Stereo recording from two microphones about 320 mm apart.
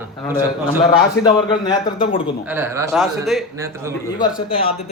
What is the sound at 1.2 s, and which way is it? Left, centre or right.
A man's voice, centre.